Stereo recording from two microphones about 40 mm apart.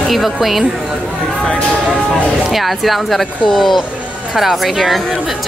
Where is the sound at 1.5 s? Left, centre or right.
Left.